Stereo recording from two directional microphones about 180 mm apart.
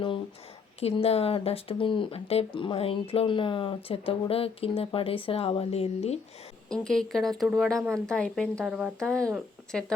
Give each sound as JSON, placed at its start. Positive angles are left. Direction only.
{"t": 0.8, "sound": "speech", "side_deg": 35}
{"t": 6.7, "sound": "speech", "side_deg": 5}
{"t": 7.8, "sound": "speech", "side_deg": -15}
{"t": 8.0, "sound": "speech", "side_deg": 5}
{"t": 8.6, "sound": "speech", "side_deg": -5}
{"t": 9.1, "sound": "speech", "side_deg": -15}